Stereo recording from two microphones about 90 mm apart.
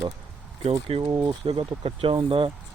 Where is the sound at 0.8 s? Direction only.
90° right; by 2.5 s 75° right (ahead or behind).